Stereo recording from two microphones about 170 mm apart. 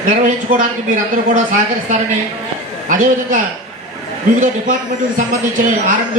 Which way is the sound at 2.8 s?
50° right (ahead or behind).